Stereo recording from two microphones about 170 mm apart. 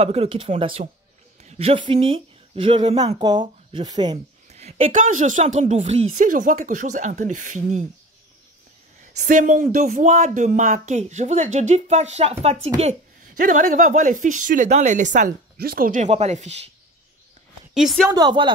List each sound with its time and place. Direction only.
0.0 s speech: 35° right (ahead or behind)
4.5 s a sound: 40° right (ahead or behind)
4.9 s speech: 45° right (ahead or behind)
9.1 s speech: 45° right (ahead or behind)
13.4 s speech: 50° right (ahead or behind)
15.5 s speech: 60° right (ahead or behind); by 16.7 s 40° right (ahead or behind)
17.7 s a woman's voice: centre (ahead or behind)
18.1 s speech: 25° right (ahead or behind)